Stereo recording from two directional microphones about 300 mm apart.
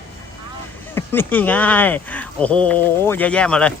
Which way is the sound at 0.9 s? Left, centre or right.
Centre.